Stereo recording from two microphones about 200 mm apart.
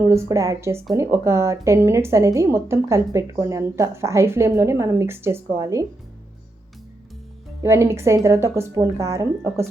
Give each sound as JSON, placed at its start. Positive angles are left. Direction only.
{"t": 0.0, "sound": "a woman's voice", "side_deg": -15}
{"t": 7.6, "sound": "a woman's voice", "side_deg": -15}